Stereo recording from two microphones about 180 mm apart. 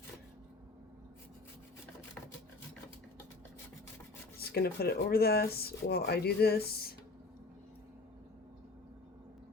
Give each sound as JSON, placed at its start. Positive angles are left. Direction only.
{"t": 4.4, "sound": "speech", "side_deg": 60}